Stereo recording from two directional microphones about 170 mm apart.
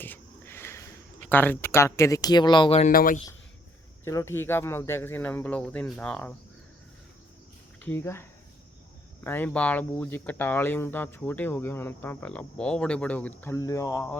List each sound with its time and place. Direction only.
0.0 s a sound: 10° left (ahead or behind)
1.3 s speech: 10° left (ahead or behind); by 2.9 s 35° left (ahead or behind)
2.9 s speech: 55° left (ahead or behind)
4.0 s speech: 15° left (ahead or behind)
7.8 s speech: 10° left (ahead or behind)